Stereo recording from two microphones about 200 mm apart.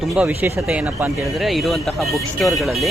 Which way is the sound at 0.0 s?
5° right (ahead or behind).